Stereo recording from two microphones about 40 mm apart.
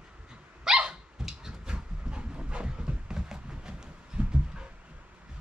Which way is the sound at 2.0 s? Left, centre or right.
Right.